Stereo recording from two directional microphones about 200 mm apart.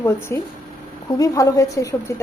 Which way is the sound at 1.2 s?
15° left (ahead or behind).